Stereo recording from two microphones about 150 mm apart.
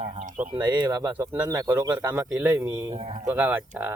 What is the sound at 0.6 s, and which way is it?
Speech, 25° right (ahead or behind).